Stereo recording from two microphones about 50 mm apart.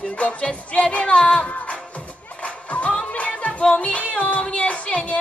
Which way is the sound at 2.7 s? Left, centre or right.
Left.